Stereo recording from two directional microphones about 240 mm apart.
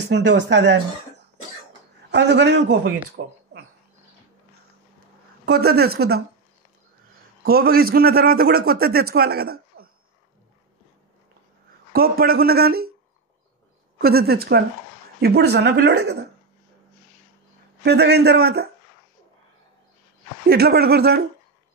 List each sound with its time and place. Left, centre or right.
0.1 s a man's voice: right
5.4 s a man's voice: right
7.4 s a man's voice: right
11.9 s a man's voice: right
13.9 s a man's voice: right
17.8 s speech: right
20.4 s a man's voice: right